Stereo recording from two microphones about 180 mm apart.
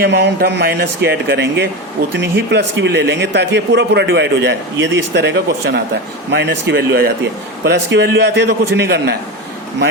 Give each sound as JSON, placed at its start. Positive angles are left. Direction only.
{"t": 0.0, "sound": "speech", "side_deg": -70}